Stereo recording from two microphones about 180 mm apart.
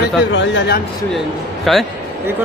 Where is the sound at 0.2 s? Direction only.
85° left.